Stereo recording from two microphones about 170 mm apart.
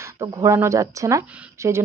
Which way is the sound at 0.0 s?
15° right (ahead or behind).